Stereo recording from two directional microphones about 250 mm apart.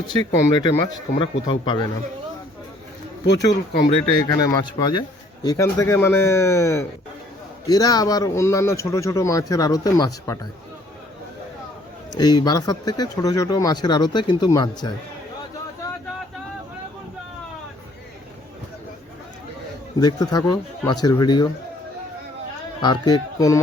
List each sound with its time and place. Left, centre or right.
0.5 s speech: centre
3.2 s speech: left
3.8 s speech: centre
12.1 s speech: centre
20.0 s speech: centre
22.8 s speech: centre